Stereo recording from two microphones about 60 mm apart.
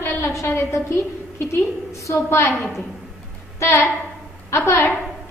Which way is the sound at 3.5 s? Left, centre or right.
Left.